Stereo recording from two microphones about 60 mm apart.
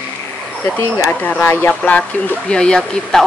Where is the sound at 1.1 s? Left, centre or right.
Left.